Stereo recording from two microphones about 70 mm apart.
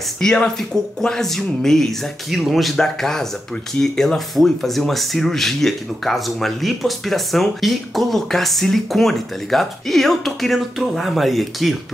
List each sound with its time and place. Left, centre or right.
0.2 s speech: centre